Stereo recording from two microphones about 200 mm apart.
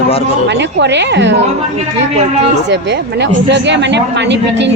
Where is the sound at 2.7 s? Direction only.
60° right (ahead or behind).